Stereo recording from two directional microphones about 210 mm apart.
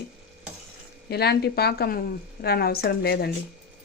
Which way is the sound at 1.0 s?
50° left (ahead or behind).